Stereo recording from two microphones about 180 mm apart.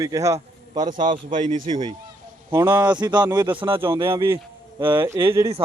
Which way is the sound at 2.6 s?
10° right (ahead or behind).